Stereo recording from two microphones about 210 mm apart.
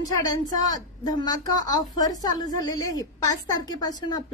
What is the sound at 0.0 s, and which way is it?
A woman's voice, 15° left (ahead or behind).